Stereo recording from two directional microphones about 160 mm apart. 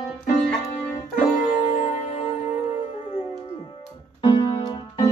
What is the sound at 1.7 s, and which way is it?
Music, 50° left (ahead or behind).